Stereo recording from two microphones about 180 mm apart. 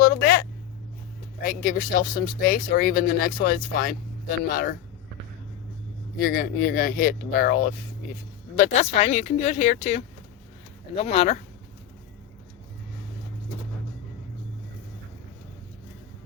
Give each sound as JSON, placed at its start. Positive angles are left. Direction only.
{"t": 0.0, "sound": "a sound", "side_deg": 55}
{"t": 1.4, "sound": "speech", "side_deg": 50}
{"t": 6.1, "sound": "speech", "side_deg": 55}
{"t": 8.5, "sound": "speech", "side_deg": 40}